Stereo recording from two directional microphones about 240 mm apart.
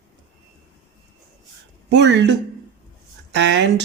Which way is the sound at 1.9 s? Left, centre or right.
Right.